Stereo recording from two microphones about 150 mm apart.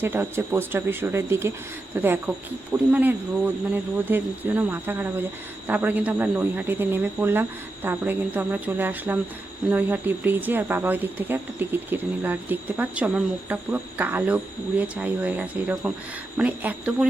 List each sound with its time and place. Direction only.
0.0 s speech: 15° right (ahead or behind)